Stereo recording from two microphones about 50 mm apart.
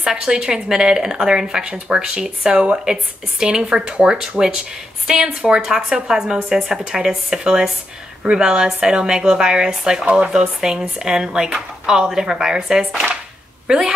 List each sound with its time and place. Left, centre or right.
0.0 s speech: centre
2.5 s speech: right
2.8 s a woman's voice: centre